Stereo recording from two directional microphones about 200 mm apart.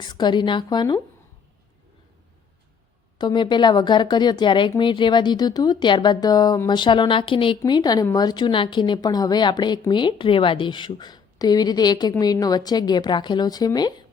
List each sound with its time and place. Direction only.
0.0 s speech: 20° left (ahead or behind)
3.2 s speech: 20° left (ahead or behind)